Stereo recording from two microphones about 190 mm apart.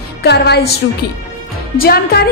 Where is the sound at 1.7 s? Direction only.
50° left (ahead or behind).